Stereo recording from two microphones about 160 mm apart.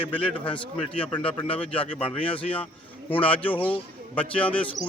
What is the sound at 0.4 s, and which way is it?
Speech, 35° left (ahead or behind).